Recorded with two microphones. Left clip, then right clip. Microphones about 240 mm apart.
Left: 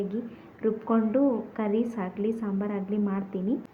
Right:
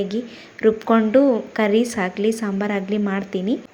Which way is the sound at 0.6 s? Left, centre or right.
Right.